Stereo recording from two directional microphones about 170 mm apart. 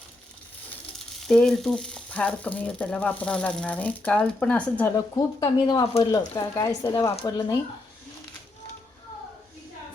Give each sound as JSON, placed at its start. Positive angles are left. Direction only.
{"t": 1.2, "sound": "frying", "side_deg": 5}
{"t": 4.9, "sound": "speech", "side_deg": 20}
{"t": 7.3, "sound": "frying", "side_deg": 20}